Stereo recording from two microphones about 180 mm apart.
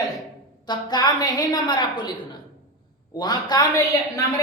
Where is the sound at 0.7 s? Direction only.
25° left (ahead or behind).